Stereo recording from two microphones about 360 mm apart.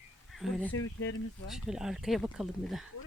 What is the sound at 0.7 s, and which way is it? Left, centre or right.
Speech, left.